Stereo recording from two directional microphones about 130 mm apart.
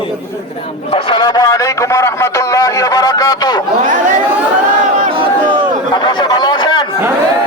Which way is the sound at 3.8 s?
90° right.